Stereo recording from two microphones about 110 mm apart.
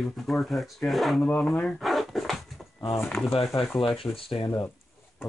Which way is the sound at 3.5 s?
50° left (ahead or behind).